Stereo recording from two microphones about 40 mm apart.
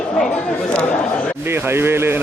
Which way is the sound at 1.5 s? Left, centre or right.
Right.